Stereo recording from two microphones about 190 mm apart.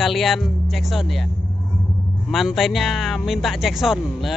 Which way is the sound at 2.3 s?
Centre (ahead or behind).